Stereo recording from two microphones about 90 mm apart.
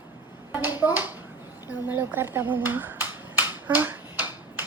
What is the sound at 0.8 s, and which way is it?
Speech, 25° right (ahead or behind).